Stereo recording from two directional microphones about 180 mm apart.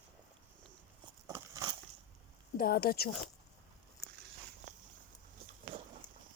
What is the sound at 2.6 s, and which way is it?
Speech, 55° left (ahead or behind).